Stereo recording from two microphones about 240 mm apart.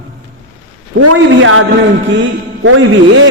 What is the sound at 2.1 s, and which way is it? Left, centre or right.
A man's voice, right.